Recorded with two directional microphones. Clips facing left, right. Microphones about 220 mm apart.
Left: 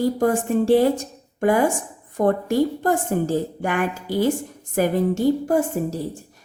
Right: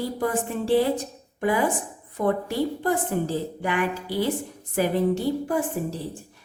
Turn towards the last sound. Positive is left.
turn(degrees=40)  # may be behind; listen again after turning